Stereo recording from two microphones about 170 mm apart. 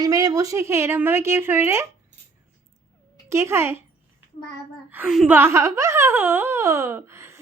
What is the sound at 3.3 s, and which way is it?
Speech, 15° right (ahead or behind).